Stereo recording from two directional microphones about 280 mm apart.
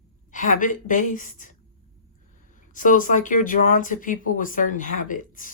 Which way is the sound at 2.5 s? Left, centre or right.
Left.